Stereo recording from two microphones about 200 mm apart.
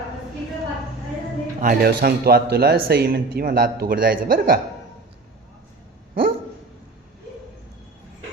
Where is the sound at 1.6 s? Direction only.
45° right (ahead or behind).